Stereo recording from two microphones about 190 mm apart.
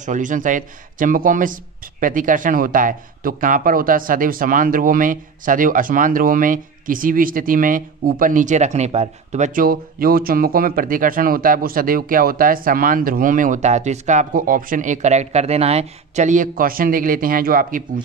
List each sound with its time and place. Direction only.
0.0 s speech: 40° right (ahead or behind)